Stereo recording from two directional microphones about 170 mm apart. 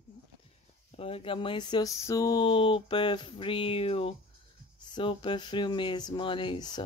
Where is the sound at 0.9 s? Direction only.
35° left (ahead or behind).